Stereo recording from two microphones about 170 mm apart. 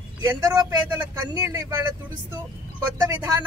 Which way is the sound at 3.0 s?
20° right (ahead or behind).